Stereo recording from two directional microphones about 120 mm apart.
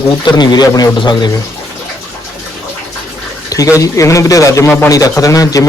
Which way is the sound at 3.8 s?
25° left (ahead or behind).